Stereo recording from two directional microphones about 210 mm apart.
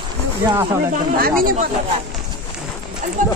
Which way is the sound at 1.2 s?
45° right (ahead or behind).